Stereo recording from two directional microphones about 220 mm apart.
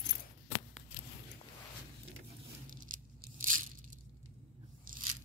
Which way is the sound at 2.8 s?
35° right (ahead or behind).